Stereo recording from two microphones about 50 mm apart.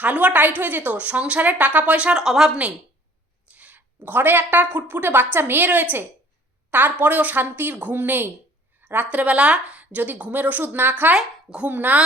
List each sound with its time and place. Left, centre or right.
0.0 s a woman's voice: right
2.1 s speech: centre
3.5 s a sound: right
4.5 s a woman's voice: right
8.8 s a sound: right
9.0 s a woman's voice: right